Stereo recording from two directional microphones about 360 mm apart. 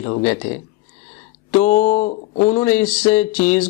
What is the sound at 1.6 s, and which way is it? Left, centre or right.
Speech, centre.